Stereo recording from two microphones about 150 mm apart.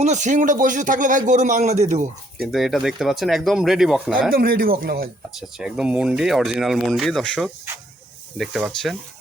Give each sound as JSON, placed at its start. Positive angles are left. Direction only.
{"t": 0.0, "sound": "speech", "side_deg": -55}
{"t": 2.5, "sound": "speech", "side_deg": 0}
{"t": 4.3, "sound": "speech", "side_deg": -75}
{"t": 5.4, "sound": "speech", "side_deg": -5}